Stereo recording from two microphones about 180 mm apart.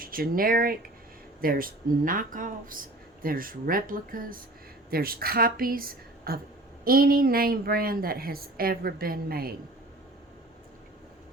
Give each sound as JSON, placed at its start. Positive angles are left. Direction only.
{"t": 0.0, "sound": "a woman's voice", "side_deg": -55}